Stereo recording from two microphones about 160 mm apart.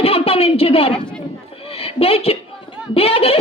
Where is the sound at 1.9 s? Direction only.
40° left (ahead or behind).